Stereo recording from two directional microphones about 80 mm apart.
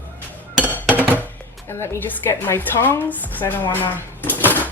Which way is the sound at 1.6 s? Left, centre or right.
Left.